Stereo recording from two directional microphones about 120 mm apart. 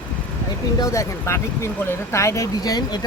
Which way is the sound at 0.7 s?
25° left (ahead or behind).